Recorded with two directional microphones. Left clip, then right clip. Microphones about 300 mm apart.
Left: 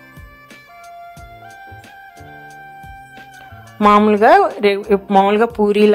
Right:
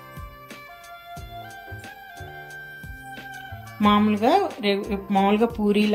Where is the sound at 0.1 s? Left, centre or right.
Centre.